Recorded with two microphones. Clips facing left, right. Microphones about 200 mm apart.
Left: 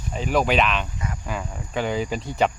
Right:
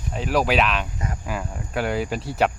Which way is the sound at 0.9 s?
40° right (ahead or behind).